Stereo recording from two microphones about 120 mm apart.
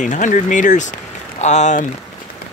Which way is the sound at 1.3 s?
75° left (ahead or behind).